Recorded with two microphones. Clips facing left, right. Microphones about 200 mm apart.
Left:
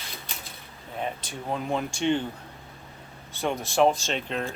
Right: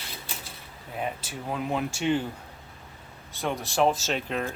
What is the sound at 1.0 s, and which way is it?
Speech, 5° right (ahead or behind).